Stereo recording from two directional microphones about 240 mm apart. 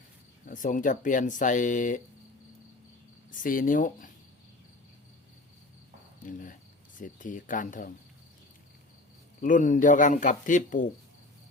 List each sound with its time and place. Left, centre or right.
0.4 s speech: left
3.3 s speech: left
6.2 s speech: left
9.4 s speech: left